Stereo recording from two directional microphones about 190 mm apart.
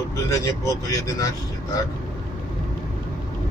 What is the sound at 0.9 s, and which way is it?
Speech, 15° left (ahead or behind).